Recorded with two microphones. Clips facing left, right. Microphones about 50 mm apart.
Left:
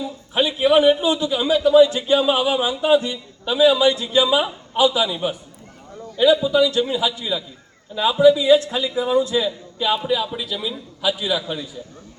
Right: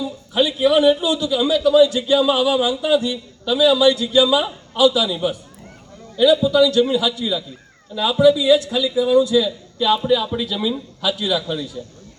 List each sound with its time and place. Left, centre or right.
0.0 s a man's voice: left
9.7 s a man's voice: centre
11.2 s a man's voice: centre